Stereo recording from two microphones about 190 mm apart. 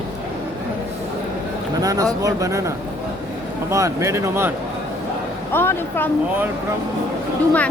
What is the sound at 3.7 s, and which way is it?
Speech, 15° right (ahead or behind).